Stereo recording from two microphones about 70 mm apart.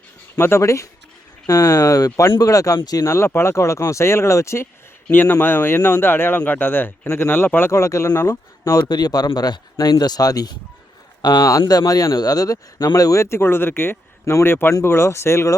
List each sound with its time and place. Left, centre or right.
0.3 s speech: left
3.1 s speech: left
5.1 s speech: left
7.7 s speech: left
8.9 s speech: left
11.6 s speech: left